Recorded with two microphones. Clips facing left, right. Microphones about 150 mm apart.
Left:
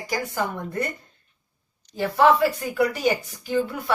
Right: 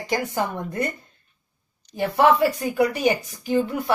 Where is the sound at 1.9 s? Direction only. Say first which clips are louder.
Even; 20° right (ahead or behind).